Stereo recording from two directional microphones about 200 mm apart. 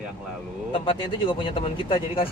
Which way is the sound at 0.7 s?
25° left (ahead or behind).